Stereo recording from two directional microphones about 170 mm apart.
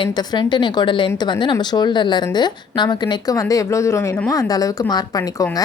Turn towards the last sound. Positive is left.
turn(degrees=20)  # may be behind; listen again after turning